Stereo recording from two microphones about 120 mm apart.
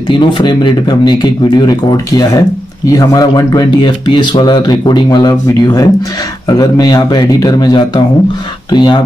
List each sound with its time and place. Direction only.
0.1 s speech: 40° left (ahead or behind)